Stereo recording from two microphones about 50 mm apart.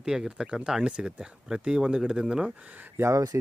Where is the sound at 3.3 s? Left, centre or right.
Right.